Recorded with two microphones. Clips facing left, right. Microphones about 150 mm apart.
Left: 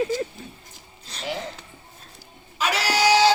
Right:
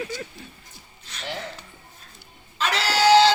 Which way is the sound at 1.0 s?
35° left (ahead or behind).